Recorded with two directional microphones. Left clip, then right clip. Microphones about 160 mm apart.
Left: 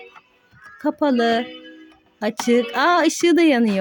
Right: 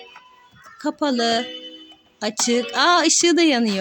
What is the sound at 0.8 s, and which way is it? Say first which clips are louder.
Speech: left 2 dB; 20° left (ahead or behind).